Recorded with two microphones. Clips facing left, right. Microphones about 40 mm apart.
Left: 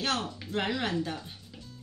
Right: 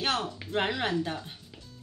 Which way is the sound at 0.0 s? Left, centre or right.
Right.